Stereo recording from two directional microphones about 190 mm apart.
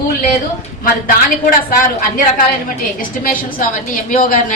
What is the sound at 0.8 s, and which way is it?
Speech, 50° left (ahead or behind).